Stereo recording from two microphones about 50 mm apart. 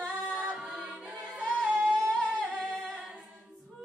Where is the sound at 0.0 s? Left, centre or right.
Centre.